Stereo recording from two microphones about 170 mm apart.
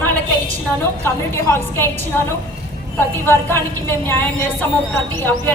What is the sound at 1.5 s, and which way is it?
Speech, 15° left (ahead or behind).